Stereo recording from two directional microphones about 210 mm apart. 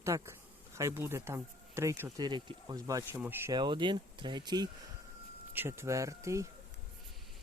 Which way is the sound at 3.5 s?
20° right (ahead or behind).